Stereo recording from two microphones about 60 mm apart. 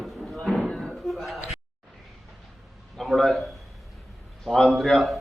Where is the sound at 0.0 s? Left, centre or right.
Centre.